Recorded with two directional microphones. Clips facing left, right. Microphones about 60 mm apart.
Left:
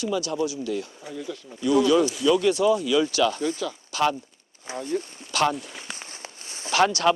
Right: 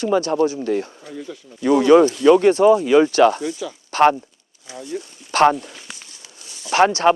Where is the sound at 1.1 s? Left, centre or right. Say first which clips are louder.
Right 2 dB; centre.